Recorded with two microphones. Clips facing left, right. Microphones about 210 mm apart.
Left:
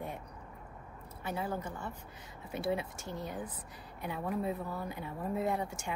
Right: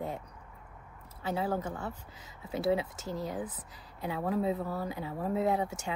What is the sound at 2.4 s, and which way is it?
Speech, 25° right (ahead or behind).